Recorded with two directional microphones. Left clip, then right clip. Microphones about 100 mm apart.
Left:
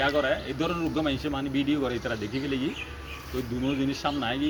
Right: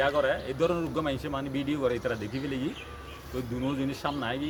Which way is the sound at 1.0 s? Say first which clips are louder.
Left 2 dB; 35° right (ahead or behind).